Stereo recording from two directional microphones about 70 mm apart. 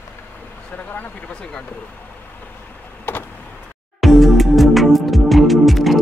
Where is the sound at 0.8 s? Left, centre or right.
Left.